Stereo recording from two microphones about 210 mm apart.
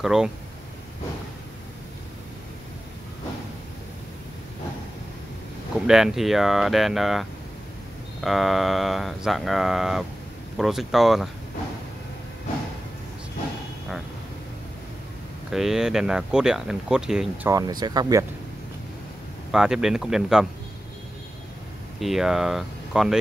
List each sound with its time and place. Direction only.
0.0 s speech: centre (ahead or behind)
5.9 s speech: centre (ahead or behind)
15.5 s speech: centre (ahead or behind)
17.5 s speech: 15° right (ahead or behind)
19.5 s speech: 5° right (ahead or behind)
22.0 s speech: centre (ahead or behind)